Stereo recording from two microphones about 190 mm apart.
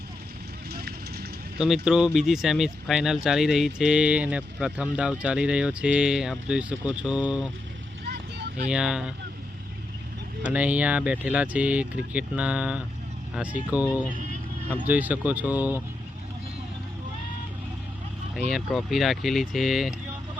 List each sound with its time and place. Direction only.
0.7 s vehicle: 55° right (ahead or behind)
1.5 s speech: 5° right (ahead or behind)
8.7 s speech: 5° right (ahead or behind)
10.4 s speech: 10° right (ahead or behind)
18.3 s speech: centre (ahead or behind)